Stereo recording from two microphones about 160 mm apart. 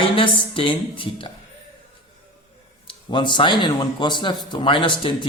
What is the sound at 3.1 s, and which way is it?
A man's voice, 30° left (ahead or behind).